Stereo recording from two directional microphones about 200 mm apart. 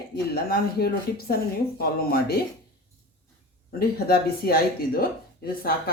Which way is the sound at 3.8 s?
50° left (ahead or behind).